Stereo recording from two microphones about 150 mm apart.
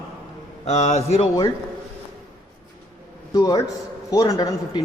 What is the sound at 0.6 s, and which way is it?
Speech, 50° left (ahead or behind).